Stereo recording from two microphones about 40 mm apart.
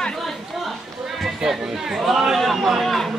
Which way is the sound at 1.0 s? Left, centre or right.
Centre.